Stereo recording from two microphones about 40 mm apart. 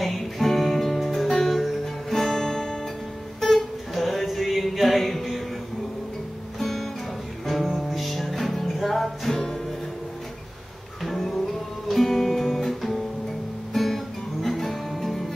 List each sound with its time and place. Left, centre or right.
0.0 s music: centre
6.6 s music: centre
11.1 s music: centre